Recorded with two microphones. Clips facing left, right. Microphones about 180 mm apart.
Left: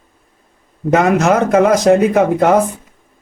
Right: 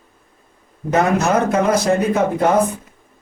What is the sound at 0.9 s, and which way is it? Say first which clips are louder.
Speech: left 4 dB; 90° left.